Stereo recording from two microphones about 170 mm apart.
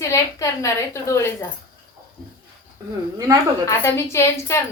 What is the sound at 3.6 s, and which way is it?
Speech, 15° left (ahead or behind).